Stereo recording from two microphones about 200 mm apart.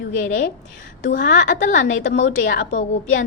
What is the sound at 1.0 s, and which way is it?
A woman's voice, 40° left (ahead or behind).